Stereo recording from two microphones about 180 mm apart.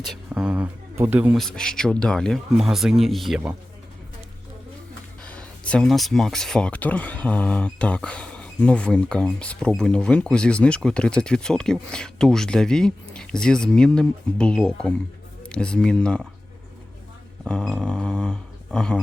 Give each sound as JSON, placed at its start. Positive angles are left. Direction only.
{"t": 0.0, "sound": "speech", "side_deg": -5}
{"t": 5.2, "sound": "speech", "side_deg": 5}
{"t": 17.4, "sound": "speech", "side_deg": 5}